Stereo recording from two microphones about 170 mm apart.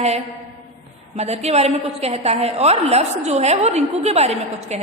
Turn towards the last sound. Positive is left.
turn(degrees=-40)  # may be behind; listen again after turning